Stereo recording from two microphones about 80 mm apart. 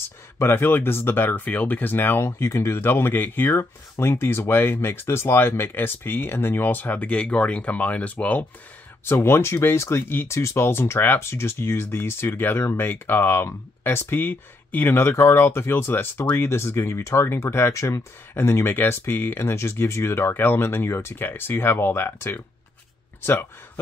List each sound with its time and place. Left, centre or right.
0.4 s speech: left
9.1 s speech: left